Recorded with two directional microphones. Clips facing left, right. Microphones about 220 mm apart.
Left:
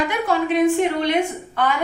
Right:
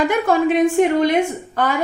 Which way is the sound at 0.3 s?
50° right (ahead or behind).